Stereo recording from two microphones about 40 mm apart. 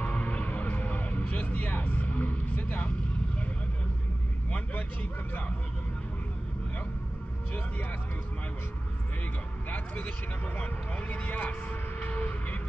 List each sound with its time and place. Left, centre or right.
0.0 s music: left
9.7 s speech: left